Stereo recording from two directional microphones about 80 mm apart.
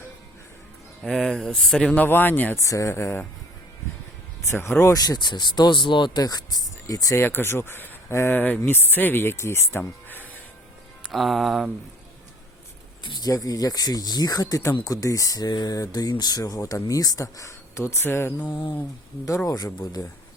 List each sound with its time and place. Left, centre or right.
1.0 s speech: centre
2.0 s speech: left
2.6 s speech: left
4.4 s speech: left
4.9 s speech: left
6.2 s speech: left
7.2 s speech: left
11.1 s speech: centre
13.0 s speech: left
14.6 s speech: left
18.4 s speech: left
19.5 s speech: left